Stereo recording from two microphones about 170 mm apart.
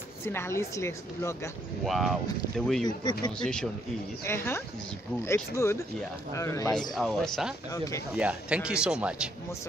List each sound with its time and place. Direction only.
0.2 s a woman's voice: 15° left (ahead or behind)
1.9 s speech: centre (ahead or behind)
3.0 s speech: 25° left (ahead or behind)
4.2 s a woman's voice: 15° left (ahead or behind)
7.0 s speech: centre (ahead or behind)
7.7 s speech: 20° left (ahead or behind)
8.2 s speech: 5° right (ahead or behind)